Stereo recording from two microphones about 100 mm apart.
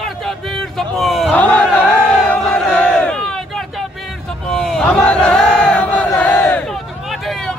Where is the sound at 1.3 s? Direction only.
15° left (ahead or behind).